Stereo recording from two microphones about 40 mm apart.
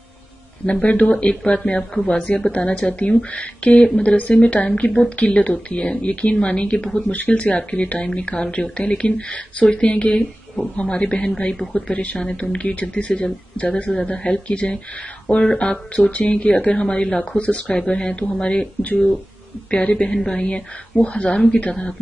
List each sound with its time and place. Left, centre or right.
0.7 s speech: left
1.4 s speech: left
2.5 s speech: left
13.2 s speech: left
19.7 s speech: left